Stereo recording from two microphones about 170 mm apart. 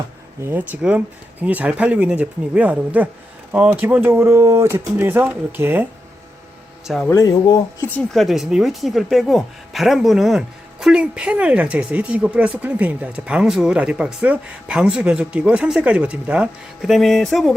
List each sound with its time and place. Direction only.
0.4 s speech: 10° right (ahead or behind)
6.8 s a woman's voice: centre (ahead or behind)
7.1 s speech: 20° left (ahead or behind)
7.9 s a woman's voice: 5° left (ahead or behind)